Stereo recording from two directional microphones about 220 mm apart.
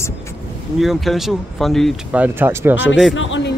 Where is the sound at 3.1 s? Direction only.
60° left (ahead or behind).